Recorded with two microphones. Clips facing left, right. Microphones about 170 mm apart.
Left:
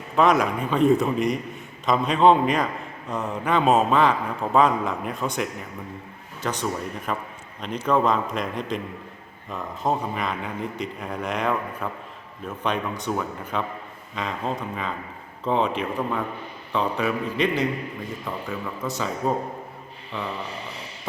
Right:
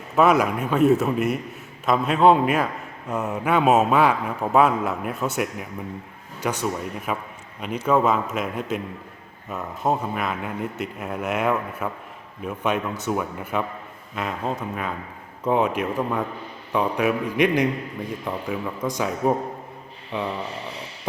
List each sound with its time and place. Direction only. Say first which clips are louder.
0.2 s a man's voice: right 1 dB; 5° right (ahead or behind)